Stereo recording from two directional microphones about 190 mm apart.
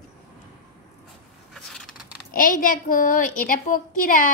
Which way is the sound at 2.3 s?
50° left (ahead or behind).